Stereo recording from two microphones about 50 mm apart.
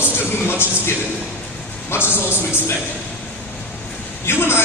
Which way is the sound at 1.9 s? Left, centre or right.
Left.